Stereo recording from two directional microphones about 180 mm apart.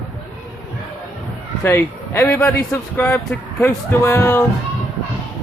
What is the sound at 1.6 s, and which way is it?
Speech, 15° left (ahead or behind).